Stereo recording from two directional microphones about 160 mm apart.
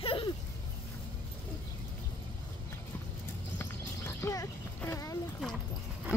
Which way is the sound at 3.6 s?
20° left (ahead or behind).